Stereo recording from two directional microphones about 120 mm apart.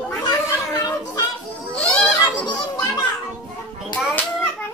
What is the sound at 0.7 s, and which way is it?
Music, 35° left (ahead or behind).